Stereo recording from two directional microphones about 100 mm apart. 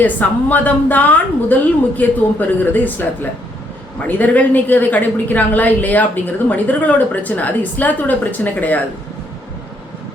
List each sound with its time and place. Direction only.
0.0 s a woman's voice: 15° left (ahead or behind)